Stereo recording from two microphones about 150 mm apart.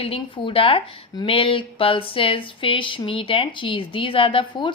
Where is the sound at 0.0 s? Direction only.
40° left (ahead or behind).